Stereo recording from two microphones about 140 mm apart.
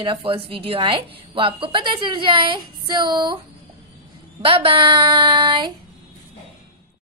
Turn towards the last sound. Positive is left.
turn(degrees=-35)  # may be behind; listen again after turning